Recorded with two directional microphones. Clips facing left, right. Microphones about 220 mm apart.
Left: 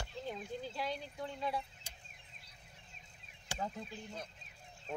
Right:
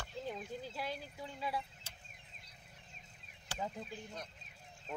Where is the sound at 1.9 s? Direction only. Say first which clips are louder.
Left 1 dB; 15° left (ahead or behind).